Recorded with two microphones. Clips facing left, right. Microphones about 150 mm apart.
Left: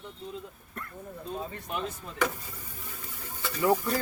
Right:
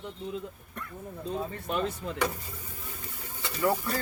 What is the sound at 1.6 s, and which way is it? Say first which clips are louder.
Speech: right 5 dB; 70° right (ahead or behind).